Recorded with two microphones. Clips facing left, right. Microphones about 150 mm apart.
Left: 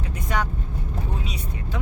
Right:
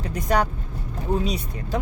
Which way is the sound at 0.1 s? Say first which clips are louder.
Right 6 dB; 40° right (ahead or behind).